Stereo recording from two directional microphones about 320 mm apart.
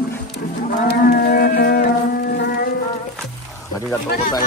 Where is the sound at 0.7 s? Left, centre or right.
Left.